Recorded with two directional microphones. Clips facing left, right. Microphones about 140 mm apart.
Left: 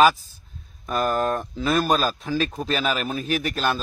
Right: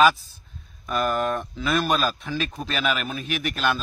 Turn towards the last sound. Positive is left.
turn(degrees=35)  # may be behind; listen again after turning